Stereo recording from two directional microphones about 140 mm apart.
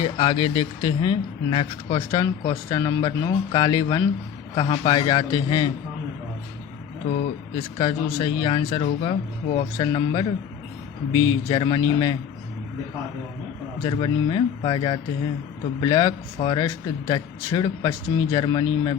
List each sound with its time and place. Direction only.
0.0 s a man's voice: 35° left (ahead or behind)
7.8 s a man's voice: 35° left (ahead or behind)
8.8 s a man's voice: 50° left (ahead or behind); by 12.1 s 30° left (ahead or behind)
13.8 s a man's voice: 35° left (ahead or behind)